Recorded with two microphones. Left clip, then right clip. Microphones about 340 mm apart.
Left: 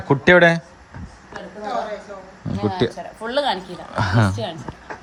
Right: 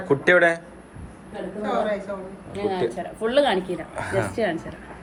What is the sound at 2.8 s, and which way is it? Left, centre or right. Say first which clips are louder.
Speech: left 6 dB; left.